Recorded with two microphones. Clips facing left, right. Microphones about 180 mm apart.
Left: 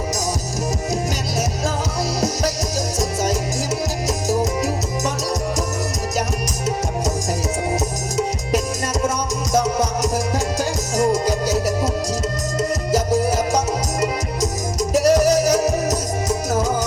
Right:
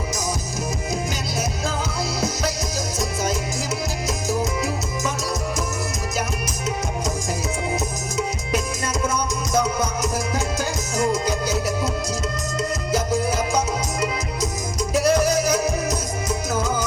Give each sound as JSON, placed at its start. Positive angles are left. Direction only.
{"t": 4.3, "sound": "music", "side_deg": 40}
{"t": 9.0, "sound": "music", "side_deg": 40}
{"t": 14.8, "sound": "music", "side_deg": 40}